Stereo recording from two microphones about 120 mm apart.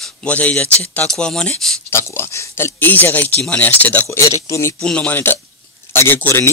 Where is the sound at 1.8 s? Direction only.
20° left (ahead or behind).